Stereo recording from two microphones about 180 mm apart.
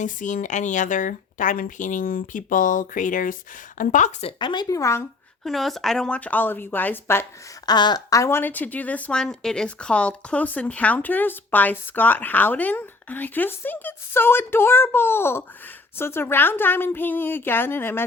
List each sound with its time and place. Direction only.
0.0 s a woman's voice: 45° left (ahead or behind); by 5.0 s 15° left (ahead or behind)
5.4 s speech: centre (ahead or behind)
7.7 s speech: 25° left (ahead or behind)